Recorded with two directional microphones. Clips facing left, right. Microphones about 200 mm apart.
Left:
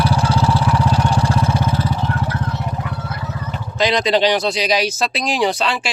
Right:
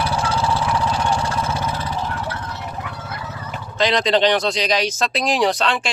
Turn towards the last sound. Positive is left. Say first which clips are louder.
# even
turn(degrees=0)  # may be behind; listen again after turning